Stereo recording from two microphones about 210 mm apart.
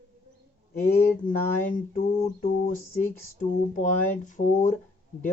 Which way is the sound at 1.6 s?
40° left (ahead or behind).